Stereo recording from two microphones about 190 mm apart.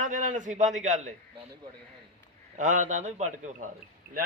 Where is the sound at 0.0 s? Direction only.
40° right (ahead or behind).